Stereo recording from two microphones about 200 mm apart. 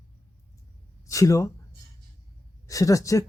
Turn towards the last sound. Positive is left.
turn(degrees=15)  # may be behind; listen again after turning